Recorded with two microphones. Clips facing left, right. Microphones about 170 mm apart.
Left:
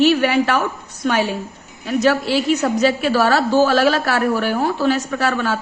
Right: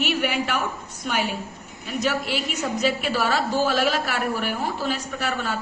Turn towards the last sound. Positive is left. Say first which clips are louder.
# left 7 dB
turn(degrees=80)